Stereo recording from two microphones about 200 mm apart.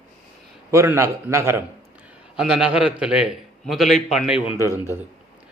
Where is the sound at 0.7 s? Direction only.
15° right (ahead or behind).